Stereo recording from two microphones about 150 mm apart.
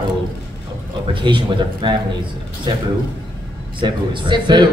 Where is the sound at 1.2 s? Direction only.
30° right (ahead or behind).